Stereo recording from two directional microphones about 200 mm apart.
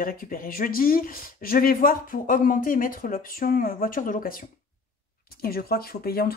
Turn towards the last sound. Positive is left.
turn(degrees=50)  # may be behind; listen again after turning